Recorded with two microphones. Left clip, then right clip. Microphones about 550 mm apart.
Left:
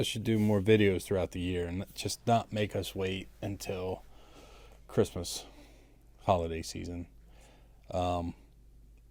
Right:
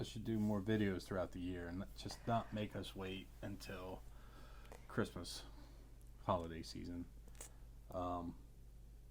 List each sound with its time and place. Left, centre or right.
0.0 s speech: left
7.9 s speech: left